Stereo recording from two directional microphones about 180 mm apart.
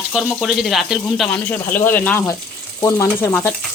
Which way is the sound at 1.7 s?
10° left (ahead or behind).